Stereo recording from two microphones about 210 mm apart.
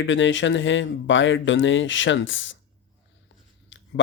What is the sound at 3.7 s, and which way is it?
Chewing, 65° left (ahead or behind).